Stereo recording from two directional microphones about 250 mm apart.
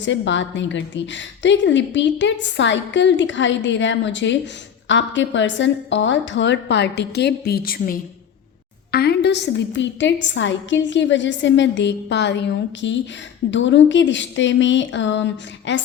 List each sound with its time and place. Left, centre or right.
0.0 s a woman's voice: left